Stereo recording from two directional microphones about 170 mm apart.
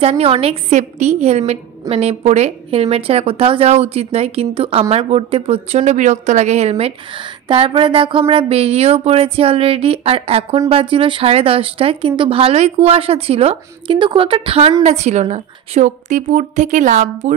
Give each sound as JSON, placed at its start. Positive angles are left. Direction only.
{"t": 0.0, "sound": "a woman's voice", "side_deg": -35}